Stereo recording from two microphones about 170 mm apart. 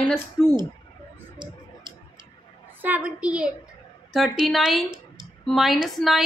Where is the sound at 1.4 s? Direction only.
25° right (ahead or behind).